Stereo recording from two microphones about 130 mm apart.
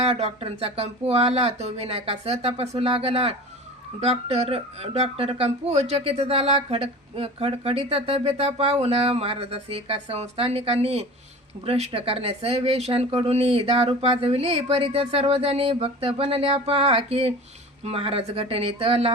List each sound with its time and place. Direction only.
0.0 s speech: 55° right (ahead or behind)